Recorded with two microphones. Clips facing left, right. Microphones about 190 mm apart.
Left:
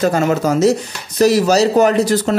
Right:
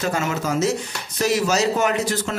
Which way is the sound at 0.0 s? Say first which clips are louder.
Left 9 dB; 40° left (ahead or behind).